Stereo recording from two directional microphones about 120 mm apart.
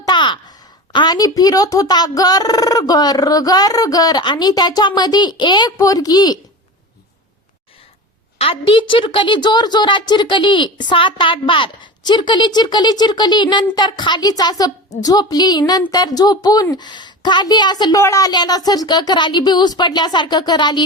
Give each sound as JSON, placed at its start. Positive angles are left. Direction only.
{"t": 0.0, "sound": "a sound", "side_deg": 40}
{"t": 0.9, "sound": "a woman's voice", "side_deg": 35}
{"t": 8.4, "sound": "a woman's voice", "side_deg": 50}